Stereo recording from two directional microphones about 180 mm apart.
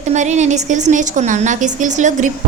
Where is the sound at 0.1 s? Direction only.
40° right (ahead or behind).